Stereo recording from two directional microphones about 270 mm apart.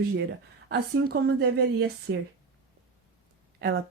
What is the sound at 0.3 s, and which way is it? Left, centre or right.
Speech, right.